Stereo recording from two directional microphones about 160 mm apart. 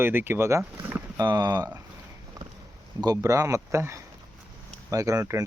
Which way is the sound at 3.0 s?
20° right (ahead or behind).